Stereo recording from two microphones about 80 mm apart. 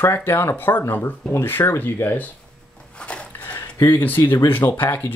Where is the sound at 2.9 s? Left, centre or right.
Centre.